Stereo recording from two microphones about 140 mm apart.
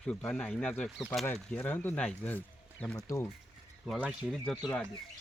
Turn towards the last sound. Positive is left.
turn(degrees=5)  # may be behind; listen again after turning